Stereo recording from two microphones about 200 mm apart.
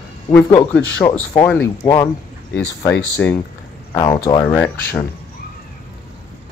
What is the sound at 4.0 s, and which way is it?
Speech, 20° left (ahead or behind).